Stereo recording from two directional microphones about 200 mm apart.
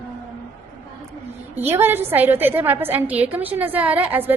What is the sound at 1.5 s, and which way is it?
A woman's voice, 10° right (ahead or behind).